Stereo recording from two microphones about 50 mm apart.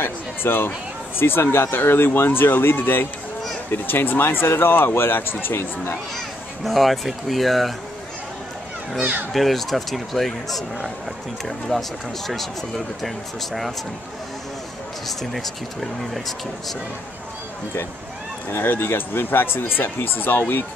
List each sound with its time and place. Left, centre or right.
0.0 s speech: left
6.6 s speech: centre
9.3 s speech: centre
11.7 s speech: centre
12.3 s speech: centre
15.0 s speech: centre
18.5 s speech: left